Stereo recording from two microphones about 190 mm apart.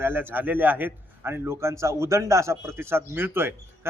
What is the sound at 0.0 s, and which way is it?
A man's voice, 10° right (ahead or behind).